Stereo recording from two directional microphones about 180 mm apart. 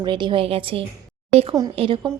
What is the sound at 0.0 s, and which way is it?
A woman's voice, 25° right (ahead or behind).